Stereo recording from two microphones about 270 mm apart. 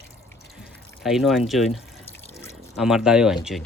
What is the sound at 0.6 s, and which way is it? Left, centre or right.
Drip, centre.